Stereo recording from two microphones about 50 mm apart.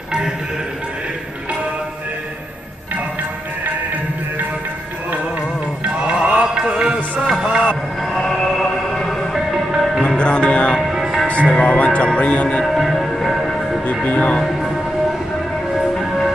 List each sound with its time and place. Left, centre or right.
5.8 s music: right
7.7 s train: centre
9.5 s music: centre
10.0 s music: centre
10.9 s music: centre
11.4 s music: centre
12.6 s music: centre
14.0 s speech: left
16.0 s train: centre